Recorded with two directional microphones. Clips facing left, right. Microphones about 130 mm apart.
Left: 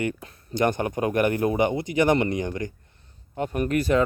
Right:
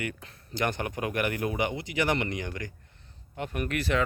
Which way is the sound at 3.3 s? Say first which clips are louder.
Left 7 dB; 35° left (ahead or behind).